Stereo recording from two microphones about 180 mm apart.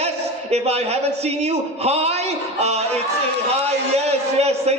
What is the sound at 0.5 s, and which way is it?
A man's voice, 35° right (ahead or behind).